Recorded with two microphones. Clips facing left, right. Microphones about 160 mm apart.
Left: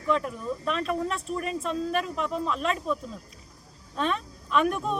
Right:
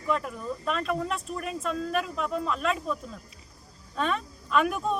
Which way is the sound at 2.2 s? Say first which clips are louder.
Even; 5° right (ahead or behind).